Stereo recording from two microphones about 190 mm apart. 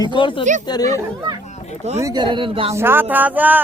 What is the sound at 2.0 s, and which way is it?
Speech, 25° right (ahead or behind).